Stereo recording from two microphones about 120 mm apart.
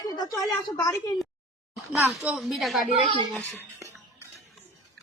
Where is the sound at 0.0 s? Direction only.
30° left (ahead or behind).